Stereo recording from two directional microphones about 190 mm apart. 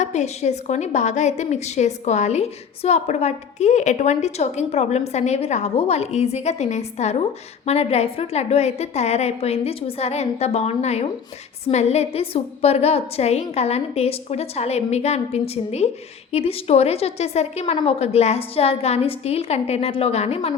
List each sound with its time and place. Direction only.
0.0 s a woman's voice: 40° left (ahead or behind)